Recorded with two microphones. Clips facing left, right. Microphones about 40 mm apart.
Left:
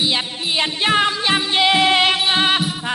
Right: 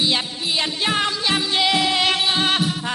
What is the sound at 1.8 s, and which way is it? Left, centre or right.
Music, left.